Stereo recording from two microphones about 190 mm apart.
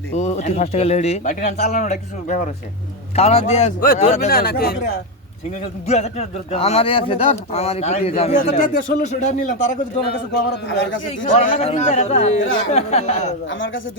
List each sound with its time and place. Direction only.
0.1 s speech: 35° left (ahead or behind)
3.2 s speech: 35° left (ahead or behind)
4.3 s speech: 55° left (ahead or behind)
5.9 s speech: 35° left (ahead or behind)
10.1 s a man's voice: 65° left (ahead or behind)
11.3 s speech: 40° left (ahead or behind)
13.5 s speech: 90° left